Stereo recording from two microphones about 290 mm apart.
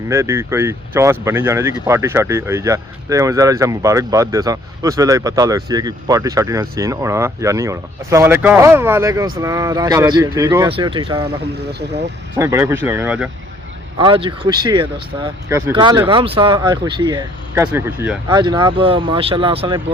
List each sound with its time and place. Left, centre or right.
0.1 s speech: centre
11.7 s speech: right
12.4 s speech: centre
14.0 s speech: centre